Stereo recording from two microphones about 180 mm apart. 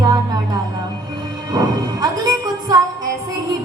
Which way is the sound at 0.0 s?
20° right (ahead or behind).